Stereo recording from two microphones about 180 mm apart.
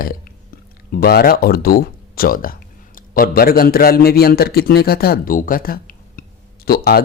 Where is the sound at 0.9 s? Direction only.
60° left (ahead or behind).